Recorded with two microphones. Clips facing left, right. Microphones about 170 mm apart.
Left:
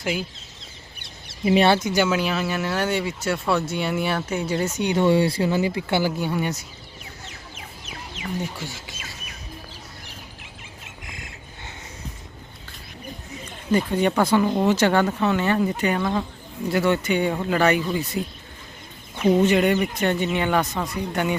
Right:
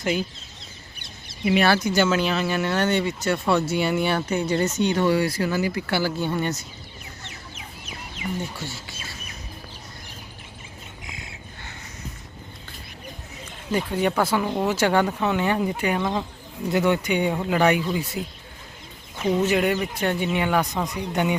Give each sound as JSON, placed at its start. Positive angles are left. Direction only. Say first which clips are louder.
{"t": 0.0, "sound": "speech", "louder": "right 2 dB", "side_deg": 10}
{"t": 1.5, "sound": "speech", "louder": "left 2 dB", "side_deg": 25}
{"t": 8.1, "sound": "chicken", "louder": "right 2 dB", "side_deg": 85}
{"t": 13.7, "sound": "speech", "louder": "left 3 dB", "side_deg": -10}
{"t": 20.8, "sound": "speech", "louder": "even", "side_deg": -20}